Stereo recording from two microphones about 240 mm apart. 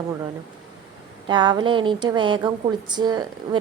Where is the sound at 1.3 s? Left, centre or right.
Centre.